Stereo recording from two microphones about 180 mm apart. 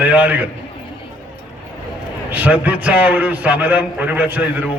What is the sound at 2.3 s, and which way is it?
A man's voice, 10° right (ahead or behind).